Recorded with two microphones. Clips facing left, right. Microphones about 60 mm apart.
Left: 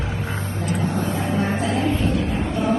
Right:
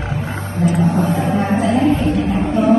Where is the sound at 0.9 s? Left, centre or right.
Right.